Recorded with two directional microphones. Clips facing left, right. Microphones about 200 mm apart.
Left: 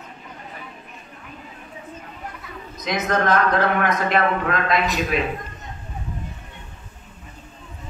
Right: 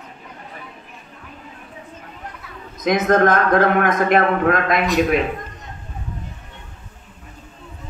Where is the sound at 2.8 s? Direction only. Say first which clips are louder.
Right 7 dB; 50° right (ahead or behind).